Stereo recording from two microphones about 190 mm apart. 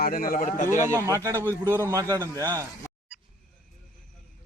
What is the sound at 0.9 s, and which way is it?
A man's voice, 15° right (ahead or behind).